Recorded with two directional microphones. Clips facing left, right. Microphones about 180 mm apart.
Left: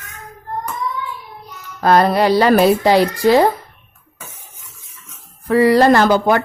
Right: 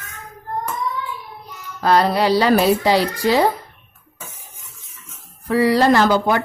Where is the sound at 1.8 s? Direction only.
50° left (ahead or behind).